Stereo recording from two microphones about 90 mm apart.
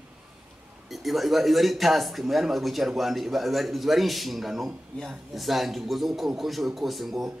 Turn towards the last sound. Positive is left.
turn(degrees=0)  # may be behind; listen again after turning